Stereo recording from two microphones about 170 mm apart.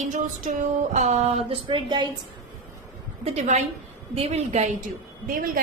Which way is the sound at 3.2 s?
45° right (ahead or behind).